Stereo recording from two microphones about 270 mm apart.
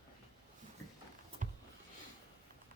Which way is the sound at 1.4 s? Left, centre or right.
Right.